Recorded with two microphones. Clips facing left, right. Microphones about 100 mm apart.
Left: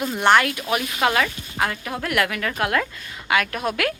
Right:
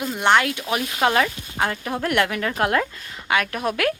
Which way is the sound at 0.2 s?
20° right (ahead or behind).